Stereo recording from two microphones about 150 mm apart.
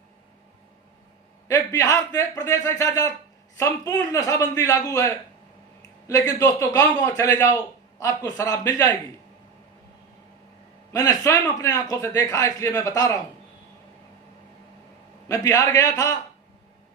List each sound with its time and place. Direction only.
1.5 s a man's voice: 20° left (ahead or behind)
10.9 s a man's voice: 20° left (ahead or behind)
15.3 s a man's voice: 20° left (ahead or behind)